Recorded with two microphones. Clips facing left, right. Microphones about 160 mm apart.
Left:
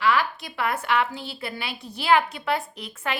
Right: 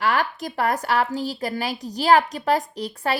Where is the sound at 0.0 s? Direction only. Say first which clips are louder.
Even; 45° right (ahead or behind).